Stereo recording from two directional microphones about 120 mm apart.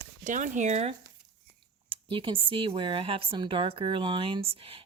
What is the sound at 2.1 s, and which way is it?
A woman's voice, 45° right (ahead or behind).